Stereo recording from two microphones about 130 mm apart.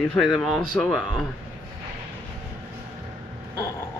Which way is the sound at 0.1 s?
5° left (ahead or behind).